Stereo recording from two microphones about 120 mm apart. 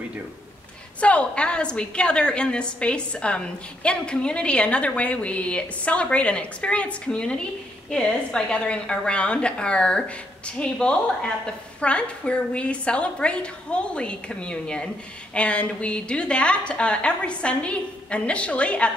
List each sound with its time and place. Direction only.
1.0 s a woman's voice: 10° left (ahead or behind)